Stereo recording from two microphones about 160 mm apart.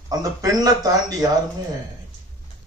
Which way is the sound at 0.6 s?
25° right (ahead or behind).